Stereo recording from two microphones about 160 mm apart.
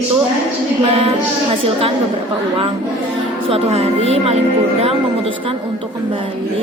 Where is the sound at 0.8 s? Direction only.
35° right (ahead or behind).